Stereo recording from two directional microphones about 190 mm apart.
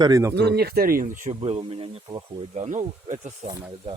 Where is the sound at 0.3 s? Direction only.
60° right (ahead or behind); by 2.6 s 30° right (ahead or behind).